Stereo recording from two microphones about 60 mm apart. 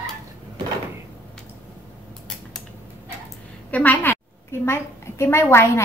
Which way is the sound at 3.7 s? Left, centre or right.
Left.